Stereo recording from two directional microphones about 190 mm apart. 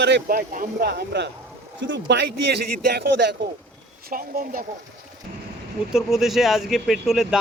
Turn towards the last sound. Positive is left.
turn(degrees=0)  # may be behind; listen again after turning